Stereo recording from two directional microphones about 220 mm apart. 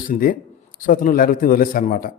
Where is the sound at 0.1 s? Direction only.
40° left (ahead or behind).